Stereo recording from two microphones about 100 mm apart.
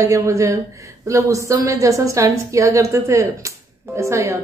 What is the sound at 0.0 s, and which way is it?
Speech, 30° right (ahead or behind).